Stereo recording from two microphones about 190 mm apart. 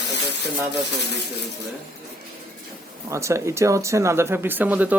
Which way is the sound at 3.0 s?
15° right (ahead or behind).